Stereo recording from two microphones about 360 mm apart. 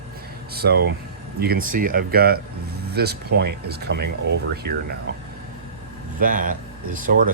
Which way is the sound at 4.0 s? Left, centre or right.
Right.